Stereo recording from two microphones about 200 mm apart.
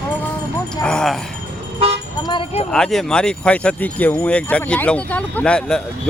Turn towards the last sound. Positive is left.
turn(degrees=5)  # may be behind; listen again after turning